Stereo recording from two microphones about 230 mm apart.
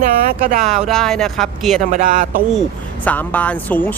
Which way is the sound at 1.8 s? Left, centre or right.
Right.